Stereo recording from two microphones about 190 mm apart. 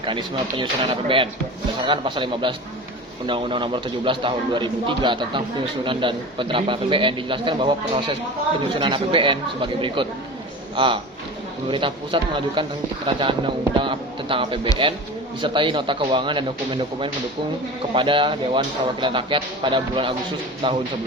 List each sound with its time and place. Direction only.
0.0 s a man's voice: 25° right (ahead or behind)